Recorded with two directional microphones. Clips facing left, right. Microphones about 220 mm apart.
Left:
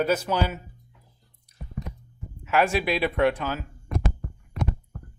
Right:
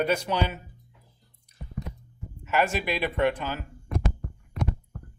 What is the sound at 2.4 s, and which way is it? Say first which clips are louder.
Speech: left 3 dB; 10° left (ahead or behind).